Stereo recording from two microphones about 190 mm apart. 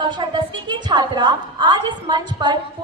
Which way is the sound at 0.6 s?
25° right (ahead or behind).